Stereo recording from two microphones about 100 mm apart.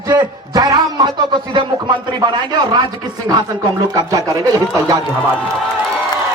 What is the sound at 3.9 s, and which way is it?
A man's voice, 40° right (ahead or behind).